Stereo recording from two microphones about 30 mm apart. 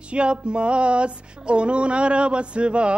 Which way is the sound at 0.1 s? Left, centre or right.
Right.